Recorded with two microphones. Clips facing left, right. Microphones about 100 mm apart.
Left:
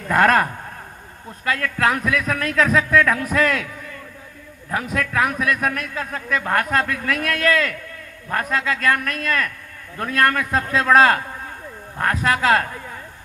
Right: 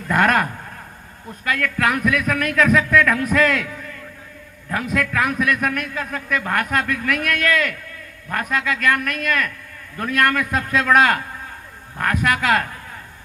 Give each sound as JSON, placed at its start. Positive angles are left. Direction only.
{"t": 0.1, "sound": "a man's voice", "side_deg": 30}
{"t": 1.5, "sound": "a man's voice", "side_deg": 30}
{"t": 4.7, "sound": "a man's voice", "side_deg": 30}